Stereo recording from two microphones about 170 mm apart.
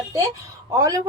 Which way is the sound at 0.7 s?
20° right (ahead or behind).